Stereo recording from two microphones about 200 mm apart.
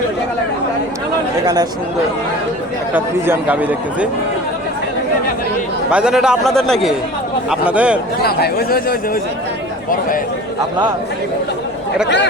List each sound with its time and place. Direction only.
2.9 s a man's voice: 10° right (ahead or behind)
5.9 s a man's voice: 5° right (ahead or behind)
8.2 s speech: 50° left (ahead or behind)
12.0 s speech: 60° left (ahead or behind)